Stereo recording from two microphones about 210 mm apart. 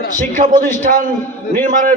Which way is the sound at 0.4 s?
40° right (ahead or behind).